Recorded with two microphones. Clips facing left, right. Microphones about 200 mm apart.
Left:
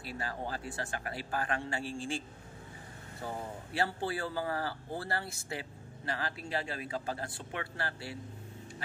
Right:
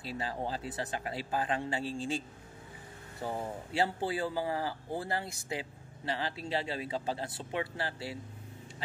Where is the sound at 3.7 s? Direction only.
20° right (ahead or behind).